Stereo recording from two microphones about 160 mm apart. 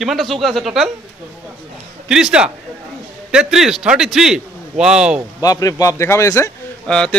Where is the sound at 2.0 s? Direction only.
5° right (ahead or behind).